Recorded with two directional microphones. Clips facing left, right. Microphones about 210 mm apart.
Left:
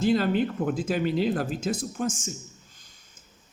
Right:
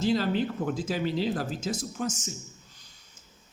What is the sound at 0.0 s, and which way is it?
Speech, 55° left (ahead or behind).